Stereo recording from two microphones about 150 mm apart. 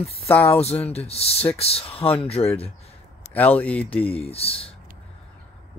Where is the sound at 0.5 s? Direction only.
45° left (ahead or behind).